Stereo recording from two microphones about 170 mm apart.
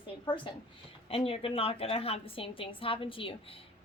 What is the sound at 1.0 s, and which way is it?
A woman's voice, 35° left (ahead or behind).